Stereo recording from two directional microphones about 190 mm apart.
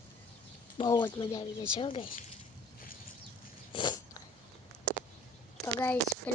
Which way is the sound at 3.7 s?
20° left (ahead or behind).